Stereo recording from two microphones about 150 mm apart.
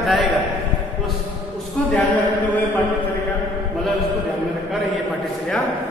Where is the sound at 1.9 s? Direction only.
10° left (ahead or behind).